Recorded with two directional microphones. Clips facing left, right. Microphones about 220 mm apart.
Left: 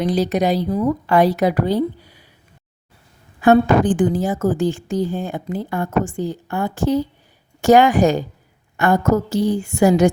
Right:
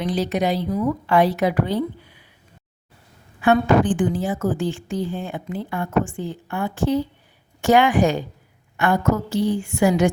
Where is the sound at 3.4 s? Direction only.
40° left (ahead or behind).